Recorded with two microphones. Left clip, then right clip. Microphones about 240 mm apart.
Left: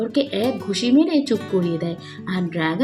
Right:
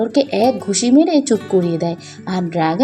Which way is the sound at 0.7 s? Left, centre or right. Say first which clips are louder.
Right 2 dB; centre.